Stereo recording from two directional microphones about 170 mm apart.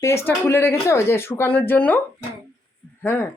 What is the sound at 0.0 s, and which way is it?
Speech, 15° left (ahead or behind).